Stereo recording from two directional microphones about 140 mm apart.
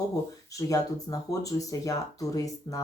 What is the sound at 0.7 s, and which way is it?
Speech, 25° left (ahead or behind).